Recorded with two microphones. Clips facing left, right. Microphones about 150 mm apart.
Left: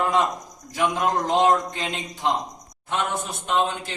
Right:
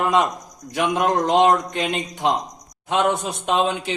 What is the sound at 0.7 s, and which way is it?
A man's voice, 75° right (ahead or behind).